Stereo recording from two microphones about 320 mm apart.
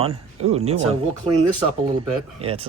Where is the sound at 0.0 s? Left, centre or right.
Centre.